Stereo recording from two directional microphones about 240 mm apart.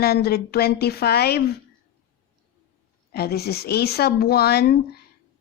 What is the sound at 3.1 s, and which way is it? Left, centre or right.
Speech, left.